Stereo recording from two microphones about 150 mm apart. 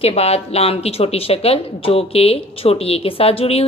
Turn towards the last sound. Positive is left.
turn(degrees=40)  # may be behind; listen again after turning